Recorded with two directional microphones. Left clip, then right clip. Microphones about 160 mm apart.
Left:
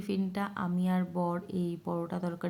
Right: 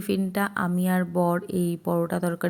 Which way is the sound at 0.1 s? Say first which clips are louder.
Right 9 dB; 30° right (ahead or behind).